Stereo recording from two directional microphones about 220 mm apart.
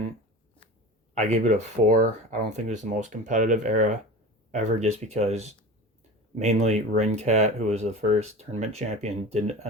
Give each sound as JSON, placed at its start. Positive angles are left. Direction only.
{"t": 1.1, "sound": "speech", "side_deg": -30}